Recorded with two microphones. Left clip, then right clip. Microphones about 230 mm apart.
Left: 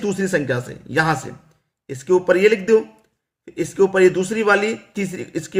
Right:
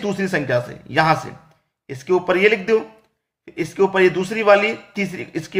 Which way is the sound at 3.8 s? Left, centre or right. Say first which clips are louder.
Left 1 dB; centre.